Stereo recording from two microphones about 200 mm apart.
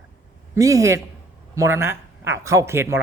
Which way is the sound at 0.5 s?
15° right (ahead or behind).